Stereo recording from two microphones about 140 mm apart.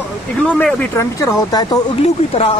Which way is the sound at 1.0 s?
25° left (ahead or behind).